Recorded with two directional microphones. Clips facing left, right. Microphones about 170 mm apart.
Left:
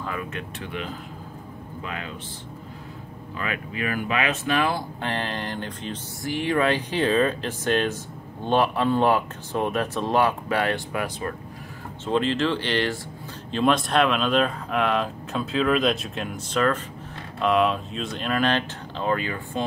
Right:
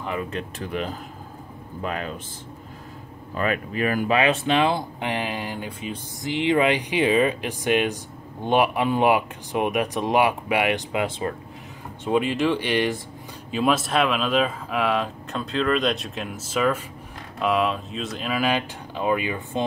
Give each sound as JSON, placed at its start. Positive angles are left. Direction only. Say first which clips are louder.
{"t": 0.0, "sound": "speech", "louder": "right 3 dB", "side_deg": -20}
{"t": 0.3, "sound": "speech", "louder": "right 4 dB", "side_deg": -35}
{"t": 3.3, "sound": "speech", "louder": "right 6 dB", "side_deg": -40}
{"t": 6.2, "sound": "speech", "louder": "right 2 dB", "side_deg": -20}
{"t": 12.0, "sound": "speech", "louder": "right 1 dB", "side_deg": -10}